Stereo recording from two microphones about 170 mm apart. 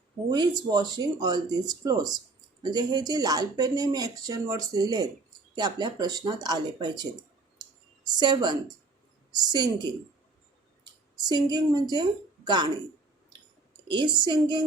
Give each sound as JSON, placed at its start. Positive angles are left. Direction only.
{"t": 0.7, "sound": "speech", "side_deg": -25}
{"t": 11.2, "sound": "speech", "side_deg": -25}
{"t": 13.8, "sound": "speech", "side_deg": -30}